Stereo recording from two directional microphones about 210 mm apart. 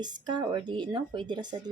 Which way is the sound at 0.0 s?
20° right (ahead or behind).